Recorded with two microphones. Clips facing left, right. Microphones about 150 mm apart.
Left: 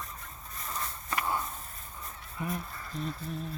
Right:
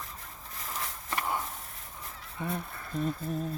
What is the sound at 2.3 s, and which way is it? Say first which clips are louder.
Speech: right 1 dB; 30° right (ahead or behind).